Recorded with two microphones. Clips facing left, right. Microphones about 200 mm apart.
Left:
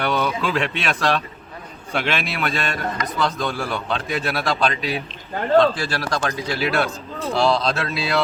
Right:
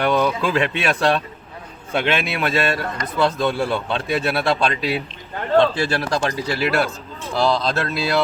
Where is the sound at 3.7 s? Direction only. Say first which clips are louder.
Right 3 dB; 30° right (ahead or behind).